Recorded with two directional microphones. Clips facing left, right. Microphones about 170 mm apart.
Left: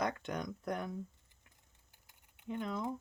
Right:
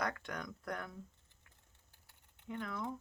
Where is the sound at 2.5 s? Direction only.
20° left (ahead or behind).